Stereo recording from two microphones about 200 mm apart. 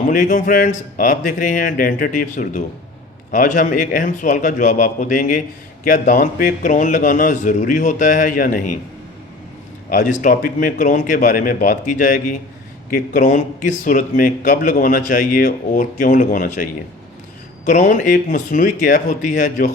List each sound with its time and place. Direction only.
0.1 s speech: 40° left (ahead or behind)
9.9 s speech: 40° left (ahead or behind)
17.7 s speech: 40° left (ahead or behind)